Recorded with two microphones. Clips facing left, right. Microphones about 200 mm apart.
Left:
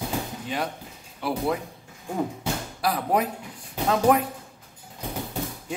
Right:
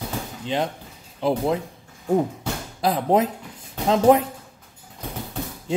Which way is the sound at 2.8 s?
25° right (ahead or behind).